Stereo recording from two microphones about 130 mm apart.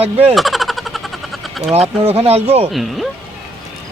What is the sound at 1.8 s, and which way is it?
Speech, 50° right (ahead or behind).